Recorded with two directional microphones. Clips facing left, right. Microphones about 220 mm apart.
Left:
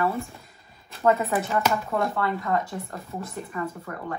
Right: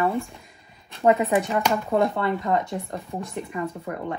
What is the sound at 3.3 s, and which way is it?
Speech, 15° right (ahead or behind).